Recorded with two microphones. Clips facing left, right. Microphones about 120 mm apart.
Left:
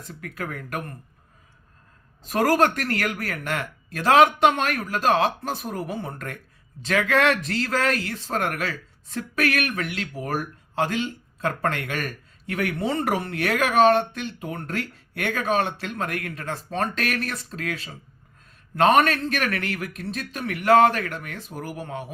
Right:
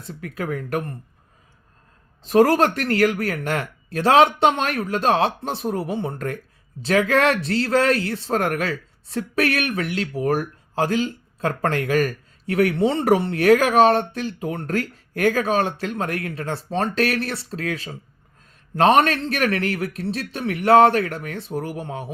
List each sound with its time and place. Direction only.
0.0 s speech: 35° right (ahead or behind)
2.2 s speech: 30° right (ahead or behind)